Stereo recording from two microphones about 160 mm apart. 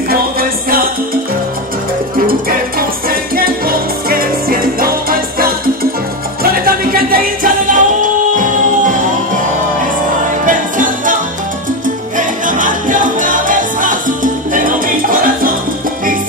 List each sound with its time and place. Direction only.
0.1 s music: 65° right (ahead or behind)
3.1 s music: 65° right (ahead or behind)
10.4 s music: 55° right (ahead or behind)
12.2 s music: 55° right (ahead or behind)